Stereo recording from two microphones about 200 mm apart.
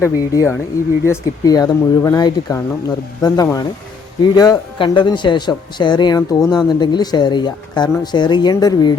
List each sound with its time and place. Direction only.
0.0 s speech: 10° left (ahead or behind)